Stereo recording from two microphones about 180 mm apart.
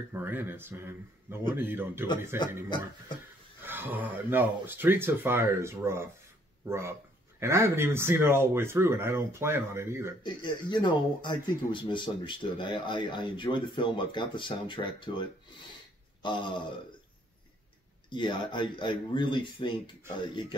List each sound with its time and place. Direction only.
0.1 s speech: 10° right (ahead or behind)
3.6 s speech: 10° right (ahead or behind)
10.2 s speech: 25° left (ahead or behind)
18.1 s speech: 25° left (ahead or behind)